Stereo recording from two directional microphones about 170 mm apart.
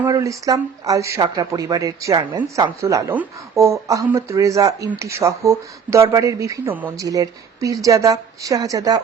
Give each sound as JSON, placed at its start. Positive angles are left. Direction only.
{"t": 0.1, "sound": "a woman's voice", "side_deg": -20}